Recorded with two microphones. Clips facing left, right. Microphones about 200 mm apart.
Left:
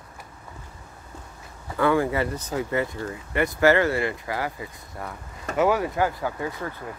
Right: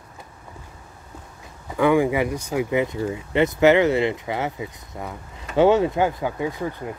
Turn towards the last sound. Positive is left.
turn(degrees=-15)  # may be behind; listen again after turning